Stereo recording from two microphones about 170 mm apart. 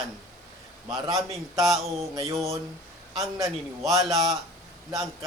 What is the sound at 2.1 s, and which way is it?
Speech, 20° right (ahead or behind).